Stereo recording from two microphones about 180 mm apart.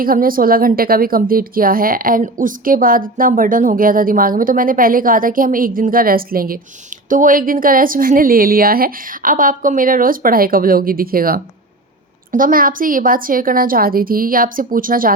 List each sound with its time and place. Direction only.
0.0 s a woman's voice: 55° right (ahead or behind)